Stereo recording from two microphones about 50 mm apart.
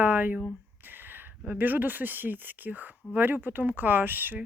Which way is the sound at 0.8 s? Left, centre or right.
Right.